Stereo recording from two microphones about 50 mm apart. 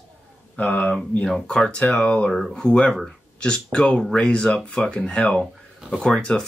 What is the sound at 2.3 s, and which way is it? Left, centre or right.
Speech, centre.